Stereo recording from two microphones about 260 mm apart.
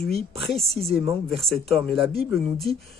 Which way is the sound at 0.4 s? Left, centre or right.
Centre.